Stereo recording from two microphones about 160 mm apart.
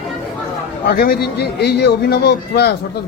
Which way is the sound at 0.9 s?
75° left (ahead or behind).